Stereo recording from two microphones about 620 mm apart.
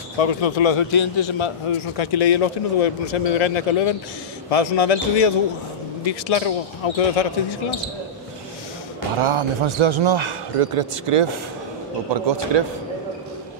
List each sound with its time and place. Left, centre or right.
0.2 s a man's voice: left
9.2 s a man's voice: right
12.1 s a man's voice: right